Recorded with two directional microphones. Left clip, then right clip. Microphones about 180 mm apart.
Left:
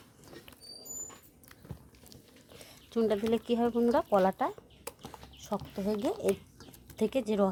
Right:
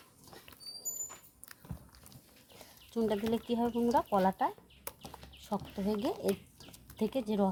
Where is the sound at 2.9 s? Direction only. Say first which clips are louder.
Left 4 dB; 20° left (ahead or behind).